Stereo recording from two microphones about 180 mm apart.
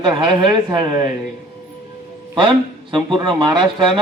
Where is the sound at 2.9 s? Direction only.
25° right (ahead or behind).